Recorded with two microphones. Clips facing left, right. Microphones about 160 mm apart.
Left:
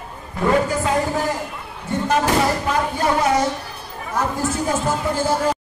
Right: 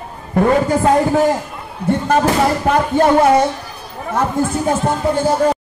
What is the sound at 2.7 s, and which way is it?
Speech, 55° right (ahead or behind).